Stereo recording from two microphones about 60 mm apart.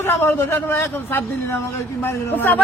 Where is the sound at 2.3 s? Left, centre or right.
Left.